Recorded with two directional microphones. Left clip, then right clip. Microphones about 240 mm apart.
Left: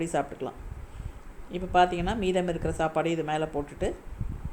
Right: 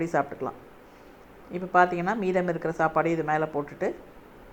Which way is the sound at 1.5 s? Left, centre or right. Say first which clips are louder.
Right 1 dB; centre.